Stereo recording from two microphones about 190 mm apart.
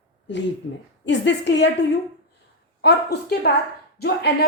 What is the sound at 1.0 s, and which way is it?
Speech, 70° left (ahead or behind).